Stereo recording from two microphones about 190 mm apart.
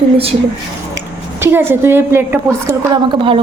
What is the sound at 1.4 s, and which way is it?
A woman's voice, 10° right (ahead or behind).